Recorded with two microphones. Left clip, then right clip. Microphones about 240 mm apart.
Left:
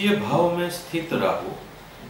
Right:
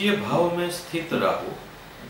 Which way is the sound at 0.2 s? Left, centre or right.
Right.